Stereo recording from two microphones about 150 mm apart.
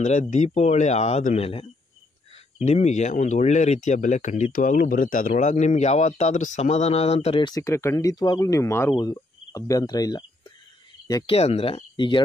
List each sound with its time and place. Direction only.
0.0 s speech: 50° left (ahead or behind)
5.3 s speech: 50° left (ahead or behind)
7.4 s speech: 20° left (ahead or behind)
11.3 s speech: 45° left (ahead or behind)